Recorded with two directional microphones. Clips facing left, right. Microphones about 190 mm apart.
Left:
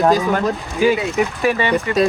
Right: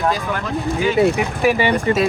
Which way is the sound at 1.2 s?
10° right (ahead or behind).